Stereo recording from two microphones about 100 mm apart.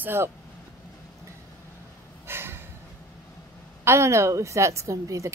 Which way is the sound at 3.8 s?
25° right (ahead or behind).